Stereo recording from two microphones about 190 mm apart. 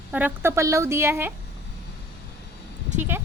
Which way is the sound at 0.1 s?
10° right (ahead or behind).